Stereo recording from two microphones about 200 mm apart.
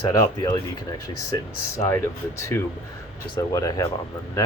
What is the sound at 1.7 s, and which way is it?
Speech, 15° left (ahead or behind).